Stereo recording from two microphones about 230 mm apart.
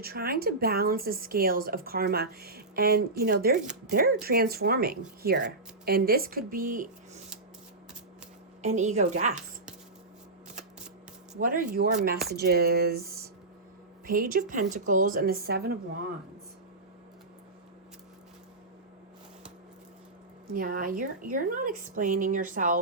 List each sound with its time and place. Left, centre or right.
0.0 s speech: right
8.6 s speech: right
11.3 s speech: right
20.5 s speech: right